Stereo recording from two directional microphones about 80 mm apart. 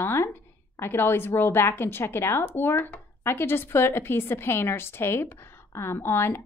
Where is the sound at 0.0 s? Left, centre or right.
Left.